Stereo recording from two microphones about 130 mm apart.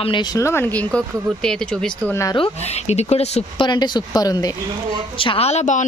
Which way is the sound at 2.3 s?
50° left (ahead or behind).